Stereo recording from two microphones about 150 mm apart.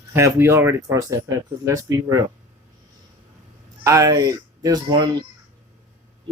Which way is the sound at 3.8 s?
20° right (ahead or behind).